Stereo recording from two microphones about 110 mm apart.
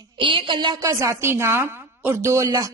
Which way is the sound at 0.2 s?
50° right (ahead or behind).